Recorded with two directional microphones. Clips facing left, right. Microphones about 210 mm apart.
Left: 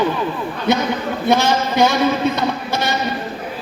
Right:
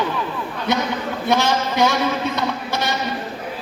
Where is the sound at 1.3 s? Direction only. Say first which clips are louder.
Left 3 dB; 30° left (ahead or behind).